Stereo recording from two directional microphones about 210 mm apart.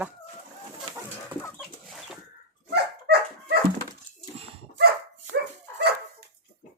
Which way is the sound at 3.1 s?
50° right (ahead or behind).